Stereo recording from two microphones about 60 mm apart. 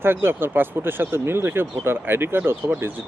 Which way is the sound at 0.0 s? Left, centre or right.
Right.